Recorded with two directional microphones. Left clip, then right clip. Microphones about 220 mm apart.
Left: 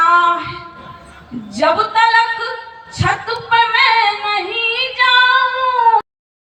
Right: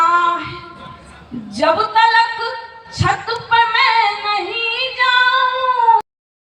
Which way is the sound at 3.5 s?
45° left (ahead or behind).